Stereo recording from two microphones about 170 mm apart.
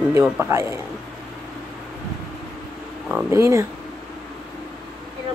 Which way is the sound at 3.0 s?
10° right (ahead or behind).